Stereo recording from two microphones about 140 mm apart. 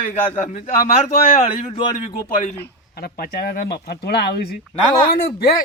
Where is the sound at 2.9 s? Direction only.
90° left.